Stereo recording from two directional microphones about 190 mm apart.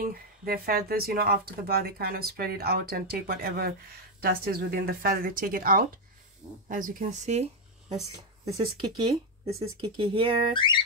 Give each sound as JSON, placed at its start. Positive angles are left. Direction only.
{"t": 0.0, "sound": "speech", "side_deg": -50}
{"t": 8.9, "sound": "speech", "side_deg": -25}